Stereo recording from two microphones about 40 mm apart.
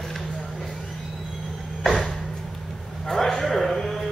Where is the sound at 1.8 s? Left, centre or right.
Centre.